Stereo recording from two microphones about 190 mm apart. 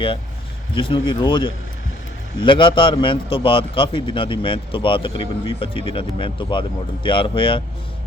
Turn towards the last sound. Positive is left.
turn(degrees=30)  # may be behind; listen again after turning